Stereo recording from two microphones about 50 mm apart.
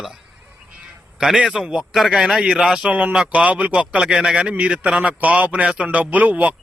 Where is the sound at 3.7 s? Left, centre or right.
Right.